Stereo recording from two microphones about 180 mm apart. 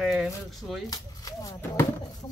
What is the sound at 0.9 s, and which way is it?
Speech, 20° left (ahead or behind).